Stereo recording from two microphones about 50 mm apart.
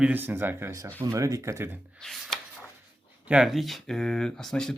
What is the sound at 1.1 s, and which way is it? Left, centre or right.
Speech, right.